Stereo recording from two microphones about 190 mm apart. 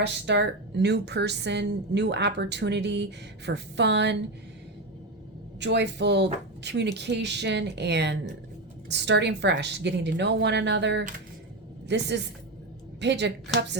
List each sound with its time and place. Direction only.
0.0 s a woman's voice: 65° right (ahead or behind)
5.5 s a woman's voice: 65° right (ahead or behind)